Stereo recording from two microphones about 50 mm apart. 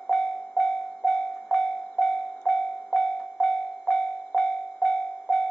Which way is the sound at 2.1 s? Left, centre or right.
Centre.